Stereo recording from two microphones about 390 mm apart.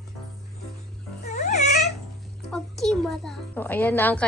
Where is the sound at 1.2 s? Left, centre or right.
Centre.